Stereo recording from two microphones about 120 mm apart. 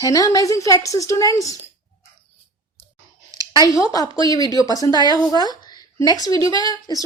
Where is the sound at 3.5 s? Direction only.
30° left (ahead or behind).